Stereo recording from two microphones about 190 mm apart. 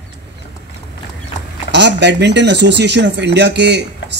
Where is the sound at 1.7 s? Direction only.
65° right (ahead or behind).